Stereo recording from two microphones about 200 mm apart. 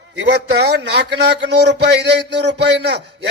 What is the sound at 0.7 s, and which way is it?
A man's voice, 55° right (ahead or behind).